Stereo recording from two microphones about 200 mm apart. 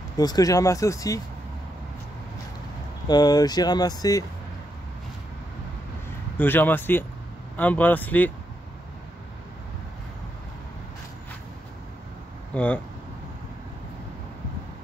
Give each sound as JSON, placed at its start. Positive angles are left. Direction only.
{"t": 0.2, "sound": "speech", "side_deg": 20}
{"t": 3.1, "sound": "speech", "side_deg": 20}
{"t": 6.3, "sound": "speech", "side_deg": 10}
{"t": 12.5, "sound": "speech", "side_deg": 5}